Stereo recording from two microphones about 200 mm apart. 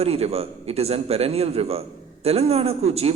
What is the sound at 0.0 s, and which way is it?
A man's voice, 30° right (ahead or behind).